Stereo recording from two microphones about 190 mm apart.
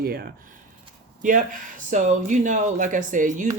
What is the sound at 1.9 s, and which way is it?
Speech, 40° right (ahead or behind).